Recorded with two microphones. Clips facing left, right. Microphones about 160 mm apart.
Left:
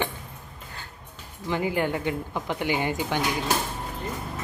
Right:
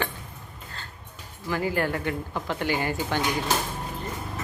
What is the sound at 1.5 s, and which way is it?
Speech, 20° left (ahead or behind).